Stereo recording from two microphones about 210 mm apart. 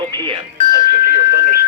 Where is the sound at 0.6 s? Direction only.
15° left (ahead or behind).